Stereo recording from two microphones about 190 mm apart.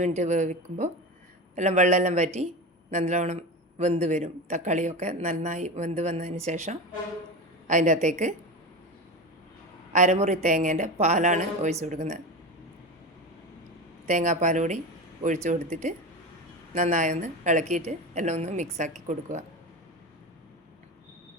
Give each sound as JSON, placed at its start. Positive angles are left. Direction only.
{"t": 0.0, "sound": "a woman's voice", "side_deg": -40}
{"t": 9.9, "sound": "a woman's voice", "side_deg": -40}
{"t": 14.1, "sound": "a woman's voice", "side_deg": -40}